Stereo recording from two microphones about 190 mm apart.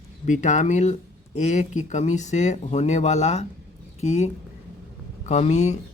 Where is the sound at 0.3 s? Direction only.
40° left (ahead or behind).